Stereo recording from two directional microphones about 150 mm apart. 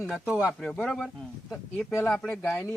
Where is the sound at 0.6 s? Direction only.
5° left (ahead or behind).